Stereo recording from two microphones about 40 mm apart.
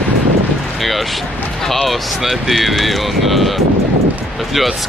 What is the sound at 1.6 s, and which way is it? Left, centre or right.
Speech, centre.